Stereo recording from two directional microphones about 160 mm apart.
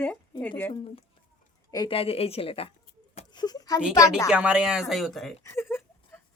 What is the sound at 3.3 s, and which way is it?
Speech, 25° left (ahead or behind).